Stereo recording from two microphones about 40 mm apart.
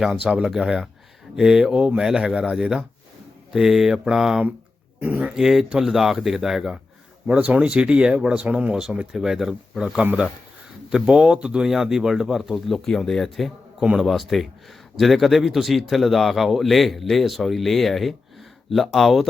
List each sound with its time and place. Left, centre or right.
0.1 s speech: right
0.4 s speech: centre
4.9 s speech: right
5.3 s speech: centre
7.3 s speech: right
7.6 s speech: right
8.4 s speech: right
9.1 s speech: centre
11.7 s a man's voice: centre